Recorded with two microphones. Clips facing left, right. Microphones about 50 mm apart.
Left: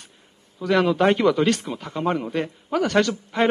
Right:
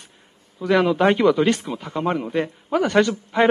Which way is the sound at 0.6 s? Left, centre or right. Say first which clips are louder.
Right 1 dB; centre.